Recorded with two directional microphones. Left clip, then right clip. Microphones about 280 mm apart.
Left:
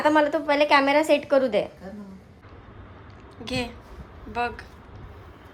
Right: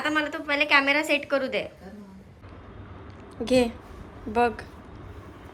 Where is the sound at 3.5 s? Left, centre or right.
Centre.